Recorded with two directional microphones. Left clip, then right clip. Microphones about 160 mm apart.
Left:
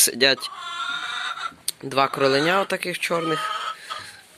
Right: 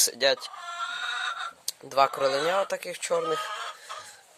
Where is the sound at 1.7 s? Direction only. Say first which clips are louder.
Left 2 dB; 20° right (ahead or behind).